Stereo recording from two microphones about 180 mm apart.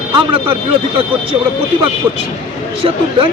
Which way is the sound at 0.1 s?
30° right (ahead or behind).